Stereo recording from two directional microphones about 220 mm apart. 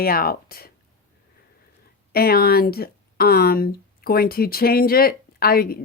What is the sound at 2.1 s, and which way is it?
Speech, 45° left (ahead or behind).